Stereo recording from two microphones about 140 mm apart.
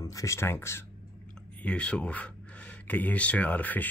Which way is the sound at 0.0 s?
25° left (ahead or behind).